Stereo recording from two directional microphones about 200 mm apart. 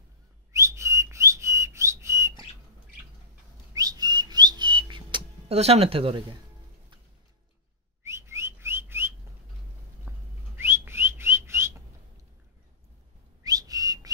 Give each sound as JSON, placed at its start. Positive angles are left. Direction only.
{"t": 0.5, "sound": "whistling", "side_deg": -15}
{"t": 3.7, "sound": "whistling", "side_deg": -20}
{"t": 8.0, "sound": "whistling", "side_deg": -15}
{"t": 13.4, "sound": "whistle", "side_deg": -20}